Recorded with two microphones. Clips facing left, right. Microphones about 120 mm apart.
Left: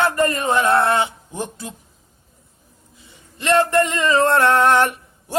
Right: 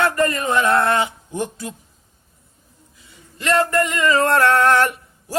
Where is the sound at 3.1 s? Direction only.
25° left (ahead or behind).